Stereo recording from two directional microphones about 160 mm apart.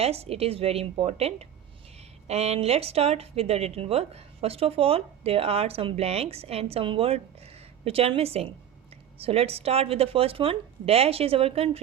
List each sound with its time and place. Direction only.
0.0 s speech: 40° right (ahead or behind)